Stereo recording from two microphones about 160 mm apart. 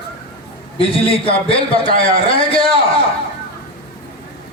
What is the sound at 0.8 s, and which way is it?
A man's voice, 35° left (ahead or behind).